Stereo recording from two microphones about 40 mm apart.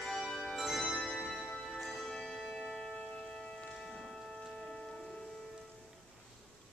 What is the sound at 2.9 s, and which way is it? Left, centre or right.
Music, centre.